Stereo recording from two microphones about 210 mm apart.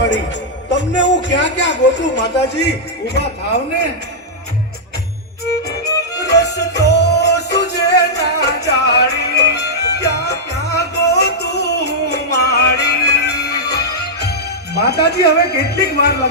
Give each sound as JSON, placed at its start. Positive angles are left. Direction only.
{"t": 0.7, "sound": "a man's voice", "side_deg": 55}
{"t": 6.2, "sound": "music", "side_deg": 55}
{"t": 14.8, "sound": "speech", "side_deg": 50}